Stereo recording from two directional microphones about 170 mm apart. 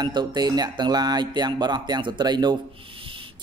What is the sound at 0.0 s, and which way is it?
Speech, 25° right (ahead or behind).